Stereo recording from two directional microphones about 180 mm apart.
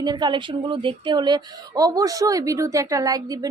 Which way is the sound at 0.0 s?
25° right (ahead or behind).